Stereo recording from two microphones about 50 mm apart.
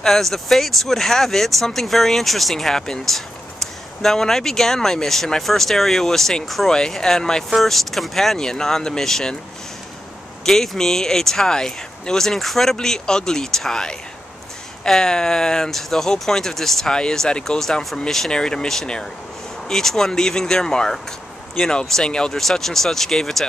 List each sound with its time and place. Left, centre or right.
0.0 s speech: centre
10.4 s speech: centre